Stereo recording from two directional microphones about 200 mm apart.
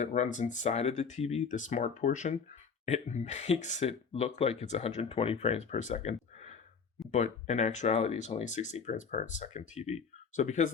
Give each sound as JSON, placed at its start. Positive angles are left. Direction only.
{"t": 0.0, "sound": "speech", "side_deg": 40}